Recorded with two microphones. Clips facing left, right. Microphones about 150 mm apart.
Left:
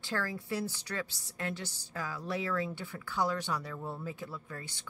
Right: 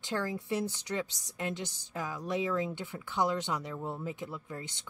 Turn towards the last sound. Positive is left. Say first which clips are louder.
# right 2 dB
turn(degrees=-20)  # may be behind; listen again after turning